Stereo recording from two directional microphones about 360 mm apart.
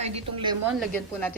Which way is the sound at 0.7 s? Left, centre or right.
Centre.